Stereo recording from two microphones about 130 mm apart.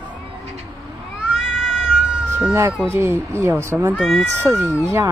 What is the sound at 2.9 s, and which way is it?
Speech, 20° right (ahead or behind).